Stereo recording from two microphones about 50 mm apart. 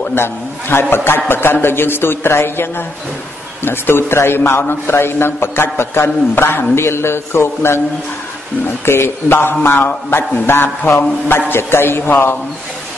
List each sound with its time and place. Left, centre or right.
0.1 s a man's voice: left
8.8 s a man's voice: left